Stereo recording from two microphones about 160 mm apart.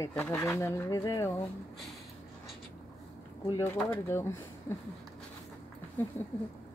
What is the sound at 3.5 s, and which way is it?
Speech, 20° left (ahead or behind).